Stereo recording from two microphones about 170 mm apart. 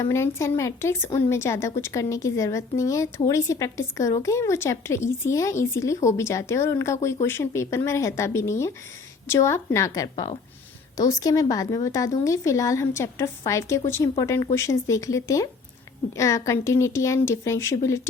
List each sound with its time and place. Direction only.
0.0 s a woman's voice: 15° left (ahead or behind)